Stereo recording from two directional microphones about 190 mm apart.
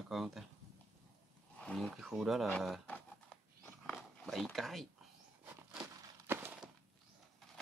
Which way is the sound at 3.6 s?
Centre (ahead or behind).